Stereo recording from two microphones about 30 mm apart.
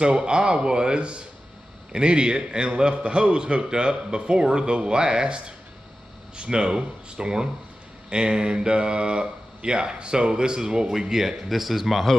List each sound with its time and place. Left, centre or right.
0.0 s speech: right; by 12.0 s centre